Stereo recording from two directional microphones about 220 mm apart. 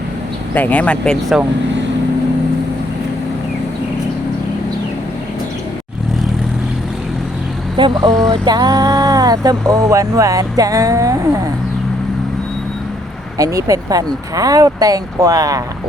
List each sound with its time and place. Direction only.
0.5 s speech: 5° left (ahead or behind)
7.8 s speech: 20° right (ahead or behind)
13.4 s speech: 15° right (ahead or behind)